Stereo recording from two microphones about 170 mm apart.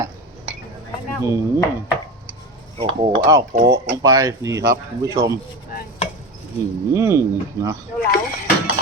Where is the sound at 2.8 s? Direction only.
30° right (ahead or behind).